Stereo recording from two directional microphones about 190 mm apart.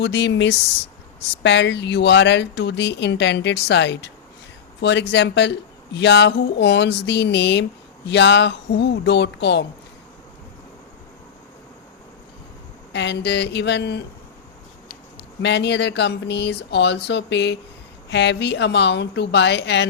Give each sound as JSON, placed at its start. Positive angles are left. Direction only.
{"t": 0.0, "sound": "speech", "side_deg": 65}
{"t": 12.9, "sound": "speech", "side_deg": 65}
{"t": 15.4, "sound": "speech", "side_deg": 65}